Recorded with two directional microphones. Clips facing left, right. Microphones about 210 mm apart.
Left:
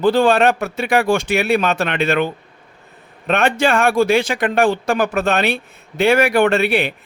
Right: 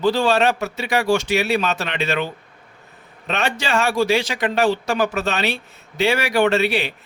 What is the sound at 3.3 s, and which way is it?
A man's voice, 55° left (ahead or behind).